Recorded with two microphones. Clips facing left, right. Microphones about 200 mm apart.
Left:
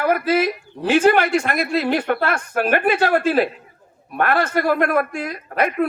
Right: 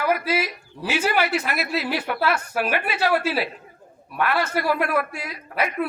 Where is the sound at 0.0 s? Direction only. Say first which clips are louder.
Left 5 dB; 50° left (ahead or behind).